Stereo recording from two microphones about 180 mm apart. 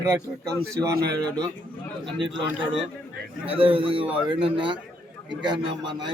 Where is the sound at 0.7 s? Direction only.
15° right (ahead or behind).